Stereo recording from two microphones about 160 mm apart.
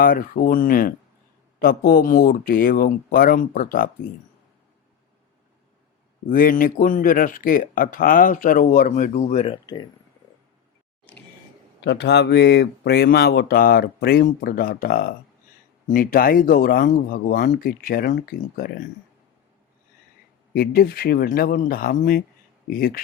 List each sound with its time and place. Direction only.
0.0 s speech: 65° left (ahead or behind)
6.3 s speech: 60° left (ahead or behind); by 9.6 s 45° left (ahead or behind)
11.8 s speech: 90° left; by 18.8 s 65° left (ahead or behind)
20.5 s speech: 75° left (ahead or behind)